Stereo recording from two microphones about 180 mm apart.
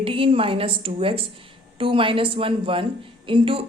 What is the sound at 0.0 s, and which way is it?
A woman's voice, 30° right (ahead or behind).